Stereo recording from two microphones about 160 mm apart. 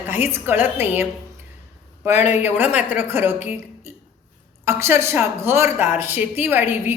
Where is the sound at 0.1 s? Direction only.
15° right (ahead or behind).